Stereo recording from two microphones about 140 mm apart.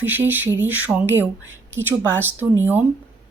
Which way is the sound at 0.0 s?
15° right (ahead or behind).